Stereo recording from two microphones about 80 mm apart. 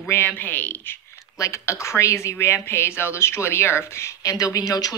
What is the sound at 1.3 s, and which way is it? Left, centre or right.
Speech, left.